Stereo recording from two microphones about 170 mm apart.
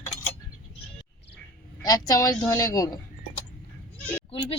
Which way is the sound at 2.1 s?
20° left (ahead or behind).